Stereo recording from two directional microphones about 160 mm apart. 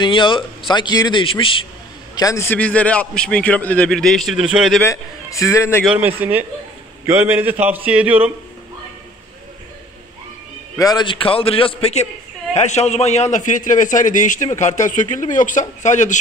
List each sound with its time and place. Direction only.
0.0 s a man's voice: 30° left (ahead or behind)
2.1 s a man's voice: 20° left (ahead or behind); by 4.8 s centre (ahead or behind)
4.8 s a man's voice: 20° left (ahead or behind)
5.9 s a man's voice: 10° right (ahead or behind)
10.8 s a man's voice: 25° left (ahead or behind); by 16.2 s 50° left (ahead or behind)